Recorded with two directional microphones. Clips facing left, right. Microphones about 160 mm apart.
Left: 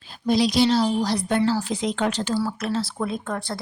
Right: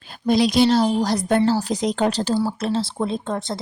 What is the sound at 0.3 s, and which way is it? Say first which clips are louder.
A woman's voice: right 3 dB; 55° right (ahead or behind).